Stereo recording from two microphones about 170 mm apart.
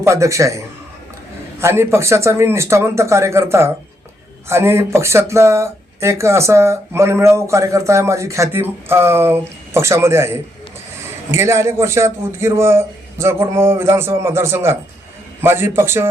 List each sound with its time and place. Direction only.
0.0 s speech: 15° right (ahead or behind)